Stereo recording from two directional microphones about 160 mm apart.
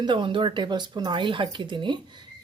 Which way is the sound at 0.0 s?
30° right (ahead or behind).